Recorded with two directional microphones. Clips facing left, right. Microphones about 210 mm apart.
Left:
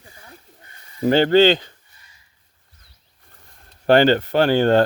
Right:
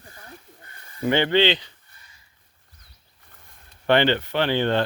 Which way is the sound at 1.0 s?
40° left (ahead or behind).